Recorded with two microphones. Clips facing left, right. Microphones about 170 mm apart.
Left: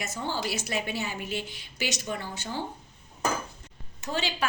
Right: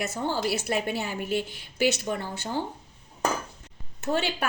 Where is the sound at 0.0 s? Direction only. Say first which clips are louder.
Right 4 dB; 55° right (ahead or behind).